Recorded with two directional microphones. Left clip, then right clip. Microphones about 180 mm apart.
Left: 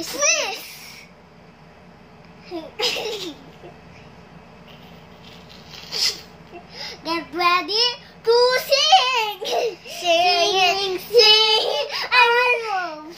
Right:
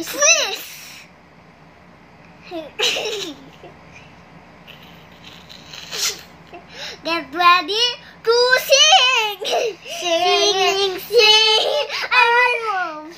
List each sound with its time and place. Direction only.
0.1 s babbling: 10° right (ahead or behind)
2.5 s a child's voice: 10° right (ahead or behind)
5.7 s sneeze: 10° right (ahead or behind)
6.9 s child singing: 10° right (ahead or behind)
10.0 s a child's voice: 20° left (ahead or behind)
11.5 s crying: 15° right (ahead or behind)